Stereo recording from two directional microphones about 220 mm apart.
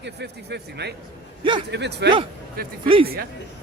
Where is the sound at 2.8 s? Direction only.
25° right (ahead or behind).